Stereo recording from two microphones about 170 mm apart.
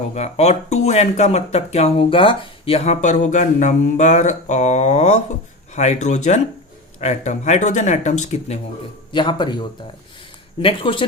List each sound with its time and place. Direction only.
0.1 s speech: 40° left (ahead or behind)
9.1 s speech: 25° left (ahead or behind)